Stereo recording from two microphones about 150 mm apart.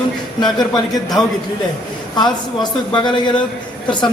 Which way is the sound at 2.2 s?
30° left (ahead or behind).